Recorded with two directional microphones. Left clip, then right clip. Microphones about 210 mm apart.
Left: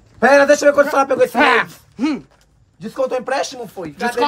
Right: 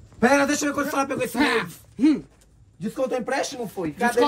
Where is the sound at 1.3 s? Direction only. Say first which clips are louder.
Left 9 dB; 30° left (ahead or behind).